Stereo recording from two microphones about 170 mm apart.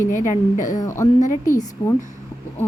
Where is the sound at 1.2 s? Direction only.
45° left (ahead or behind).